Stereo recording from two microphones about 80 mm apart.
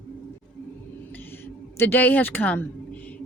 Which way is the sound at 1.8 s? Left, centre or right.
Left.